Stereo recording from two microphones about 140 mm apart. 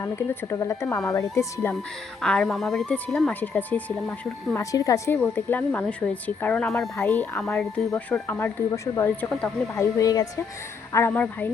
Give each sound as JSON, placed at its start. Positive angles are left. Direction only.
{"t": 0.0, "sound": "speech", "side_deg": 20}
{"t": 2.2, "sound": "speech", "side_deg": 5}
{"t": 4.5, "sound": "speech", "side_deg": 25}
{"t": 5.1, "sound": "speech", "side_deg": 10}
{"t": 6.9, "sound": "speech", "side_deg": 15}